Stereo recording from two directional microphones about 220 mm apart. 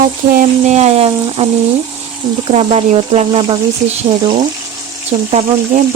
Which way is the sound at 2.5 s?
25° right (ahead or behind).